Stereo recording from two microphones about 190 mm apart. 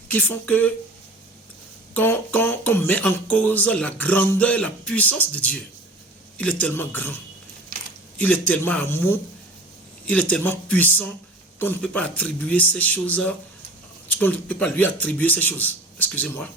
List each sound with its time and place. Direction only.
0.1 s speech: 10° left (ahead or behind)
1.9 s speech: 10° left (ahead or behind)
8.2 s speech: 10° left (ahead or behind)